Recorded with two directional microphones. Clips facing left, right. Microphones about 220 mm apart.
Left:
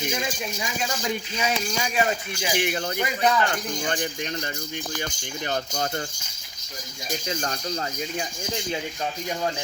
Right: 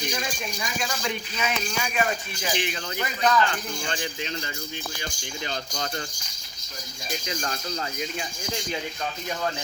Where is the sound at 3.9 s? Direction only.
50° left (ahead or behind).